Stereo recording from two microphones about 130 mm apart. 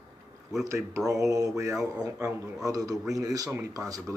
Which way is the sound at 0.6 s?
25° right (ahead or behind).